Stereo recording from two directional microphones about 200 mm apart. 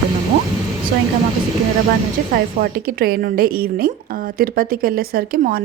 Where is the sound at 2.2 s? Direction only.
45° right (ahead or behind).